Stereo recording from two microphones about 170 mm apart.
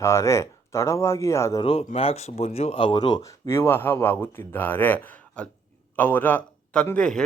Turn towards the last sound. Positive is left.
turn(degrees=5)  # may be behind; listen again after turning